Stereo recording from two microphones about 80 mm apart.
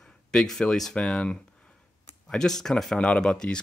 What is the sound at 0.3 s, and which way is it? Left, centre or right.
Speech, centre.